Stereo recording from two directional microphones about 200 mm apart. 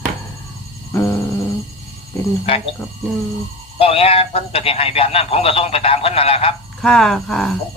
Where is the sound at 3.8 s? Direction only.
30° left (ahead or behind).